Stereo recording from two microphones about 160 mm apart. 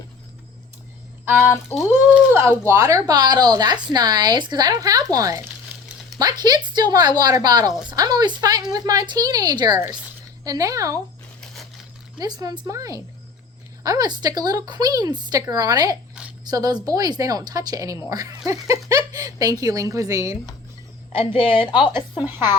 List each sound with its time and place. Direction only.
1.9 s speech: 10° right (ahead or behind)
12.2 s speech: 25° right (ahead or behind)
21.2 s a woman's voice: 30° left (ahead or behind)